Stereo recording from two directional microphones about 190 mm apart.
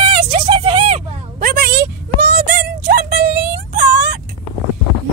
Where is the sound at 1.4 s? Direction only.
50° right (ahead or behind).